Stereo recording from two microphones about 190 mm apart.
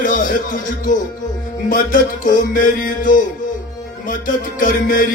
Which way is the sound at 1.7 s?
45° left (ahead or behind).